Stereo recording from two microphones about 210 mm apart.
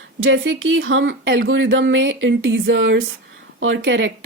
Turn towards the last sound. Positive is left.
turn(degrees=-65)  # may be behind; listen again after turning